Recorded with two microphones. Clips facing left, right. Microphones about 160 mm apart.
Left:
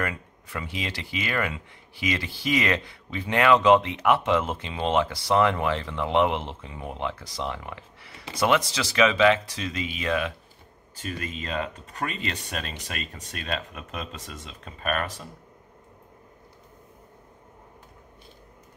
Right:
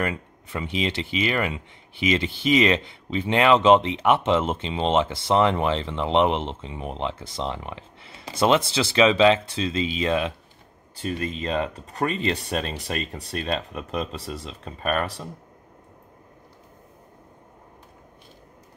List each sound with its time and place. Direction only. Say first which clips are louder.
0.0 s speech: right 3 dB; 20° right (ahead or behind)